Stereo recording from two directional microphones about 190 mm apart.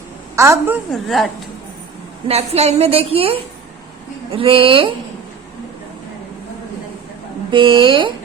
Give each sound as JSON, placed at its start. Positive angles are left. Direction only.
{"t": 0.3, "sound": "a woman's voice", "side_deg": -15}
{"t": 0.9, "sound": "a woman's voice", "side_deg": 0}
{"t": 2.2, "sound": "a woman's voice", "side_deg": -35}
{"t": 7.5, "sound": "a woman's voice", "side_deg": -25}